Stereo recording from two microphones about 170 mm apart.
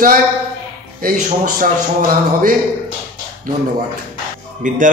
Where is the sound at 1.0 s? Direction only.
55° right (ahead or behind).